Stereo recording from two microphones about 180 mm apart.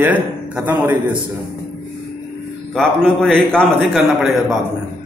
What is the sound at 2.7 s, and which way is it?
A man's voice, 5° left (ahead or behind).